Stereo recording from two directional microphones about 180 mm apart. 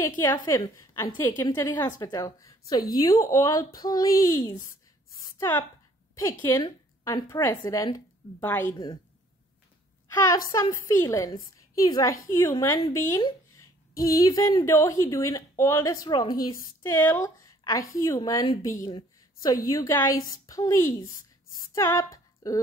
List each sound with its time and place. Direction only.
0.5 s a woman's voice: 15° left (ahead or behind)
6.6 s speech: 20° left (ahead or behind)
10.1 s speech: 20° left (ahead or behind)
16.8 s a woman's voice: 10° left (ahead or behind)